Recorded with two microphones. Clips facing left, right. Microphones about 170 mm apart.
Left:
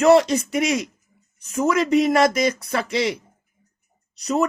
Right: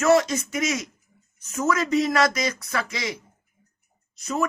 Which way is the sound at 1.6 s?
25° left (ahead or behind).